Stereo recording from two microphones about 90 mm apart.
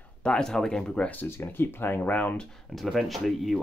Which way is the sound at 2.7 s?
Centre (ahead or behind).